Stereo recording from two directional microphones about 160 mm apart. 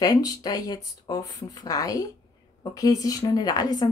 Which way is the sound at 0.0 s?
20° left (ahead or behind).